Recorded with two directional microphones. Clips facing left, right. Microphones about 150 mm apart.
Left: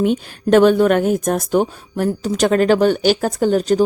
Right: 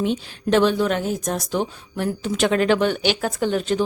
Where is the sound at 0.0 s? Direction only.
50° left (ahead or behind).